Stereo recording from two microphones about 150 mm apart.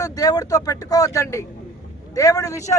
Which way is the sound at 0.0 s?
25° left (ahead or behind).